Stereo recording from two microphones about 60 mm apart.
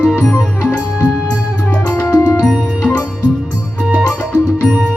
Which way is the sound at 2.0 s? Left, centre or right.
Left.